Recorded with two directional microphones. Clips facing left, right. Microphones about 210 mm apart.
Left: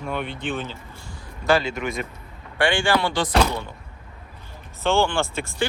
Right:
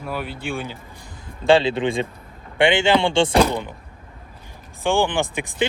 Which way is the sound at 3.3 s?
15° right (ahead or behind).